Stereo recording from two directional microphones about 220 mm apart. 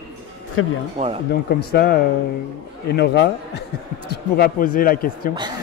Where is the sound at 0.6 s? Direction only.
65° left (ahead or behind).